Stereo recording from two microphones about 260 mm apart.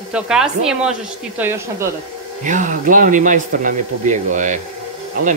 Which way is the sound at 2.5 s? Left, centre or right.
Right.